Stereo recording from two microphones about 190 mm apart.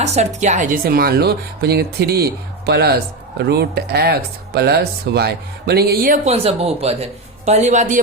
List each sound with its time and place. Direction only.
0.0 s speech: 35° right (ahead or behind)
6.2 s speech: 30° right (ahead or behind)